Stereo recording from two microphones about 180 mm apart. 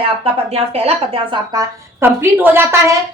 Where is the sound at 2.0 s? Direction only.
10° right (ahead or behind).